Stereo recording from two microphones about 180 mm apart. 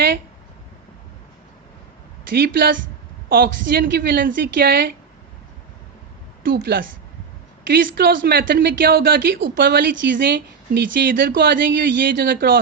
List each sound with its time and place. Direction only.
2.3 s a woman's voice: 55° right (ahead or behind)
6.4 s a woman's voice: 60° right (ahead or behind); by 11.3 s 75° right (ahead or behind)
11.3 s a woman's voice: 55° right (ahead or behind)
12.2 s a woman's voice: 55° right (ahead or behind)